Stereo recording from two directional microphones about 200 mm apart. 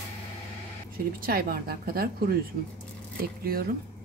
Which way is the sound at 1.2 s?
45° right (ahead or behind).